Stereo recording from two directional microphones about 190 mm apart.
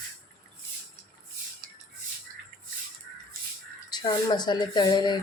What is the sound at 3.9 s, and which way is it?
Speech, 20° left (ahead or behind).